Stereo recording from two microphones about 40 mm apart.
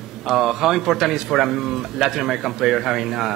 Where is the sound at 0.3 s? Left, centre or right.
Centre.